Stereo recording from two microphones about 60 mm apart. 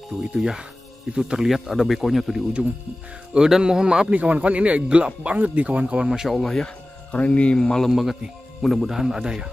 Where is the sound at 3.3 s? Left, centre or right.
Centre.